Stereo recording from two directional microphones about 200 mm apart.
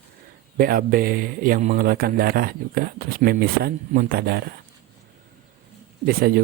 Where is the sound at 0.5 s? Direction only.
50° right (ahead or behind).